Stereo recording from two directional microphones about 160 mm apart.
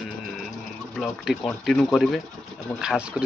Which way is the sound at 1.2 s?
Centre (ahead or behind).